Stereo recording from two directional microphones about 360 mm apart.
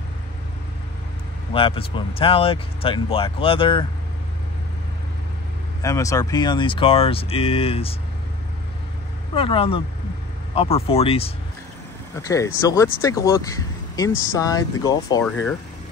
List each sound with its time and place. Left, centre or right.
1.5 s speech: centre
5.8 s speech: centre
9.3 s speech: centre